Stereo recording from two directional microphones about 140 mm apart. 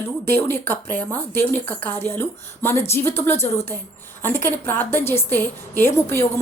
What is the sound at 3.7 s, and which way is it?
Speech, 25° right (ahead or behind).